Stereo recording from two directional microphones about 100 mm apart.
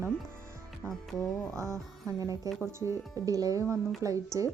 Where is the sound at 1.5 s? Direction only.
30° right (ahead or behind).